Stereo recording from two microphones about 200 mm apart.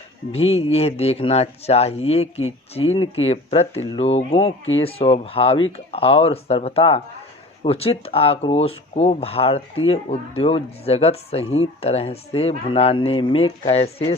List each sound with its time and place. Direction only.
0.3 s speech: 30° left (ahead or behind)